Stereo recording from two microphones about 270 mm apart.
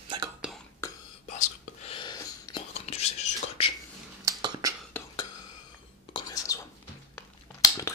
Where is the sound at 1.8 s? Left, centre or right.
Centre.